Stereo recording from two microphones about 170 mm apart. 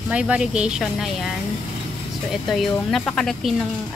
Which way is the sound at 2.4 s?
Centre (ahead or behind).